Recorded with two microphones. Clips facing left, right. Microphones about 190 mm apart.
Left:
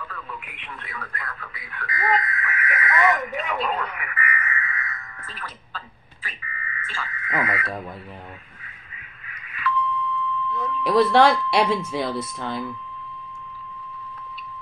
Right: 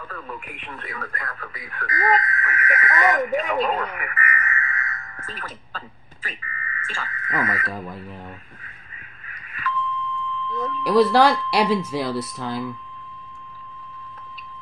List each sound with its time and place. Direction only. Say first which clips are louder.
0.0 s speech: right 2 dB; 45° right (ahead or behind)
7.6 s speech: even; centre (ahead or behind)
9.6 s beep: left 2 dB; 45° right (ahead or behind)
10.5 s a sound: even; 45° right (ahead or behind)
10.8 s speech: right 1 dB; centre (ahead or behind)